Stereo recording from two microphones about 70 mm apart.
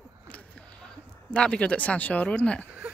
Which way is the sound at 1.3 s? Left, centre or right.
Centre.